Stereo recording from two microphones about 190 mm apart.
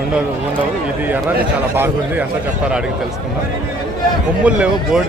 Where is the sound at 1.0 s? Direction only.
10° right (ahead or behind).